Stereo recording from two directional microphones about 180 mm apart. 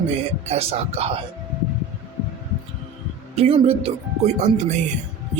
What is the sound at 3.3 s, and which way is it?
Speech, 35° right (ahead or behind).